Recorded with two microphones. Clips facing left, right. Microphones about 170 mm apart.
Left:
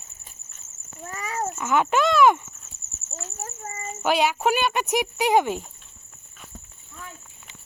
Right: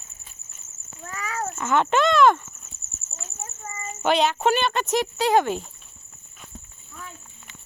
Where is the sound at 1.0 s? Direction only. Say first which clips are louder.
Left 1 dB; 25° left (ahead or behind).